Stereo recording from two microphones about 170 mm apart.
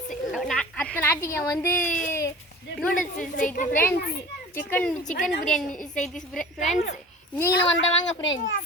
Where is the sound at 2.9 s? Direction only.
50° left (ahead or behind).